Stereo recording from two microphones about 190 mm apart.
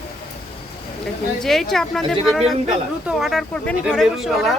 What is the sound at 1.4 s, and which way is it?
Speech, centre (ahead or behind).